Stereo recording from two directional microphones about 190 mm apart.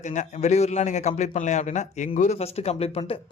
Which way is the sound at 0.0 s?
40° left (ahead or behind).